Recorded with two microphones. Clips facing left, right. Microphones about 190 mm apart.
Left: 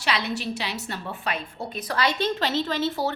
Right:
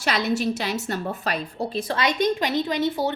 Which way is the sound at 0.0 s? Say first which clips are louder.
Right 4 dB; 45° right (ahead or behind).